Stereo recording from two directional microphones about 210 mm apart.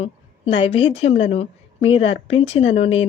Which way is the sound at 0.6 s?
25° left (ahead or behind).